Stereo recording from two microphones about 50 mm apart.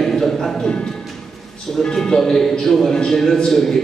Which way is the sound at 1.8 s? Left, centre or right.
Centre.